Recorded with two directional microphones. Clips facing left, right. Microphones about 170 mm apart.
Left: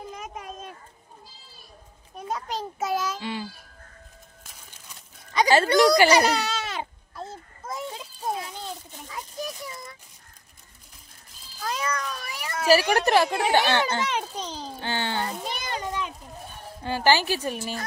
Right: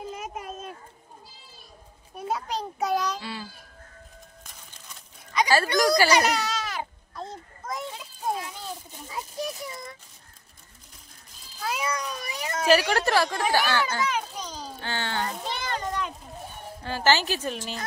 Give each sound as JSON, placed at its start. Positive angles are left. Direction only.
{"t": 0.1, "sound": "a sound", "side_deg": -5}
{"t": 2.1, "sound": "a child's voice", "side_deg": -5}
{"t": 3.2, "sound": "speech", "side_deg": 20}
{"t": 5.3, "sound": "a child's voice", "side_deg": 25}
{"t": 7.2, "sound": "a sound", "side_deg": 5}
{"t": 11.6, "sound": "cat", "side_deg": -10}
{"t": 12.6, "sound": "a child's voice", "side_deg": 10}
{"t": 14.9, "sound": "a sound", "side_deg": 15}
{"t": 16.8, "sound": "speech", "side_deg": 15}